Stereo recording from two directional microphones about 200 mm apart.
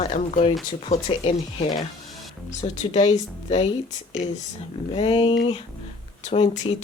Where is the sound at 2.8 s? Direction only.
35° left (ahead or behind).